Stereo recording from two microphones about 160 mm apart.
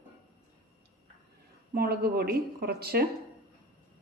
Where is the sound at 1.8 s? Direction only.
70° right (ahead or behind).